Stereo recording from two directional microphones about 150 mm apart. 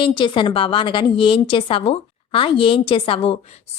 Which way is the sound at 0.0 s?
35° left (ahead or behind).